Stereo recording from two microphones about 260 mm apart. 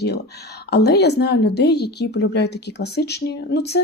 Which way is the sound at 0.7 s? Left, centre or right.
Left.